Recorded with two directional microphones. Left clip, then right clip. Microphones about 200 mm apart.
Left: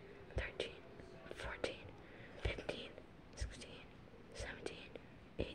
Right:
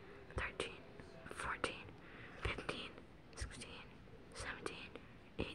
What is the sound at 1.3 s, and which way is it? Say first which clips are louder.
Whispering: right 2 dB; 25° right (ahead or behind).